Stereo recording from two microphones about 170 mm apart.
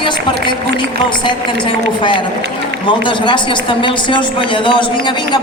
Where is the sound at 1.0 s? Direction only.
30° left (ahead or behind).